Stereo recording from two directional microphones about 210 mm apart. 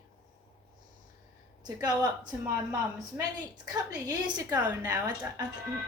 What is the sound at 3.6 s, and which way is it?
A woman's voice, 20° right (ahead or behind).